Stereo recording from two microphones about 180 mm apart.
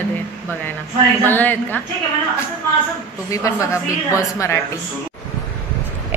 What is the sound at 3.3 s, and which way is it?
A woman's voice, 15° left (ahead or behind).